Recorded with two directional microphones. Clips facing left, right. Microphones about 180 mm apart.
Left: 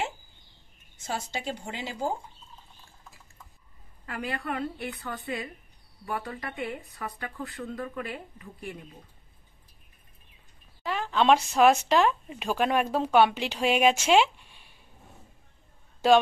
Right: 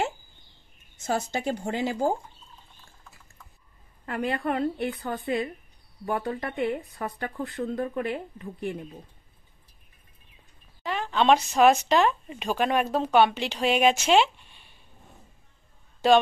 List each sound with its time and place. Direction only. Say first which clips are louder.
1.0 s speech: right 6 dB; 45° right (ahead or behind)
4.0 s a sound: right 6 dB; 50° right (ahead or behind)
4.4 s speech: right 6 dB; 45° right (ahead or behind)
6.0 s speech: right 5 dB; 40° right (ahead or behind)
10.8 s speech: right 1 dB; centre (ahead or behind)
16.0 s speech: right 1 dB; 5° left (ahead or behind)